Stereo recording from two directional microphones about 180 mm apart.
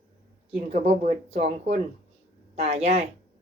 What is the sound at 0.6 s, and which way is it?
Speech, 35° right (ahead or behind).